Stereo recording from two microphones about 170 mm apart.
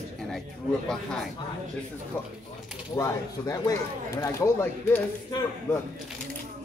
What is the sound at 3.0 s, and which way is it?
Speech, 20° left (ahead or behind).